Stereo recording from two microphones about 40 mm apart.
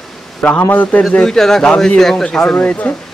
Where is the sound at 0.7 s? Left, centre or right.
Left.